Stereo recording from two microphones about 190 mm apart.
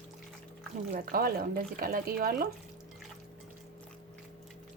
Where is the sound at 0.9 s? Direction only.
50° right (ahead or behind).